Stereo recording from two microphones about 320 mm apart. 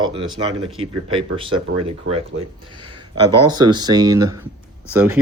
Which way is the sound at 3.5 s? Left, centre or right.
Centre.